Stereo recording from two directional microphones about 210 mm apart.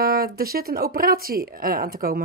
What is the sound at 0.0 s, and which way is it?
Speech, 45° right (ahead or behind).